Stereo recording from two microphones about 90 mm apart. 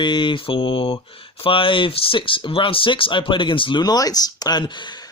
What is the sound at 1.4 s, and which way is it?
Speech, 75° left (ahead or behind).